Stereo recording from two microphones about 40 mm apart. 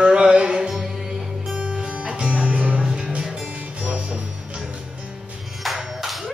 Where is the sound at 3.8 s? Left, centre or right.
Right.